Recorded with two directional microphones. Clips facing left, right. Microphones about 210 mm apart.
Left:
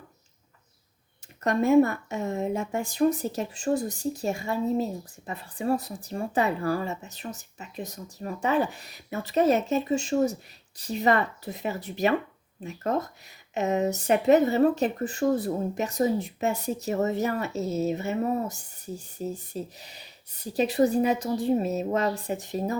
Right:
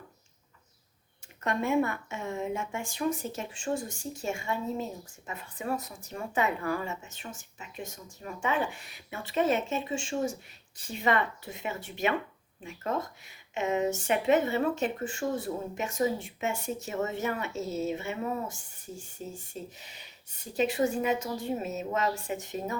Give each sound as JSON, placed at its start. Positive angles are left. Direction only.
{"t": 1.5, "sound": "speech", "side_deg": 40}